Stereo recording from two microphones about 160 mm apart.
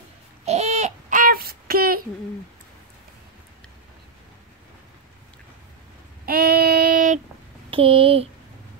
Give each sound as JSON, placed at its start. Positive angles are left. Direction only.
{"t": 0.5, "sound": "a sound", "side_deg": -40}
{"t": 6.2, "sound": "child singing", "side_deg": -70}
{"t": 7.7, "sound": "speech", "side_deg": -35}